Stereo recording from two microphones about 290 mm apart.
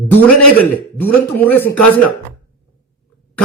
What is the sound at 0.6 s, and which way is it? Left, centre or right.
A man's voice, centre.